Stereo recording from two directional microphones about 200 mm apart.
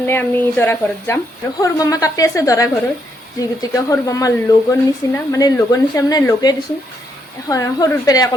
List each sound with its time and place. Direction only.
0.0 s speech: 10° left (ahead or behind)